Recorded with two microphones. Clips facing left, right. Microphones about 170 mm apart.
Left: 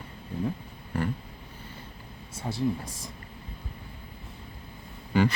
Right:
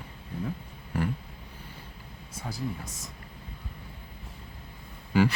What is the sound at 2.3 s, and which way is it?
Speech, 25° left (ahead or behind).